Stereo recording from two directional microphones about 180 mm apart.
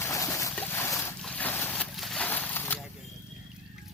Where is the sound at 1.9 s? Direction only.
Centre (ahead or behind).